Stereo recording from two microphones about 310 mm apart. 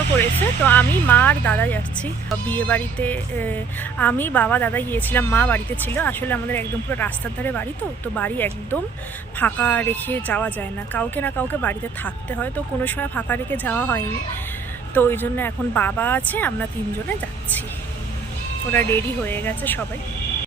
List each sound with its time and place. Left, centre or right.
0.2 s speech: centre
18.7 s speech: centre